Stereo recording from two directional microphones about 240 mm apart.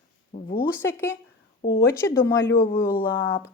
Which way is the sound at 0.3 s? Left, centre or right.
Left.